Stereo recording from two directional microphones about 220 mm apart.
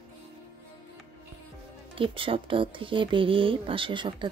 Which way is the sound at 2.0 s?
25° right (ahead or behind).